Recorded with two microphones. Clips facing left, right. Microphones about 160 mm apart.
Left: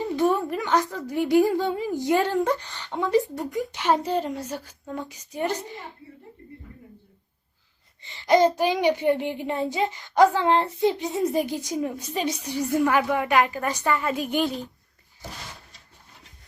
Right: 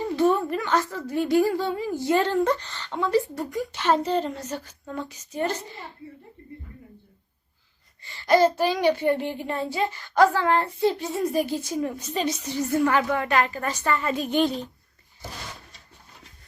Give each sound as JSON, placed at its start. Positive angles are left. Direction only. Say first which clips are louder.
{"t": 0.0, "sound": "speech", "louder": "right 1 dB", "side_deg": 15}
{"t": 8.0, "sound": "speech", "louder": "even", "side_deg": 20}